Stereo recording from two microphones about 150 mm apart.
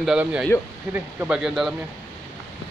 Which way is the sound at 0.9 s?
10° right (ahead or behind).